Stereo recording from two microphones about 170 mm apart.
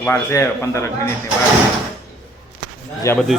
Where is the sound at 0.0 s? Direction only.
15° left (ahead or behind).